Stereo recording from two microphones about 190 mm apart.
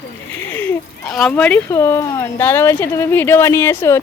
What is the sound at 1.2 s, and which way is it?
Speech, 5° left (ahead or behind).